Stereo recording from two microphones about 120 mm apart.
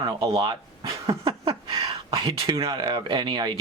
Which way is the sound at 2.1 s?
40° right (ahead or behind).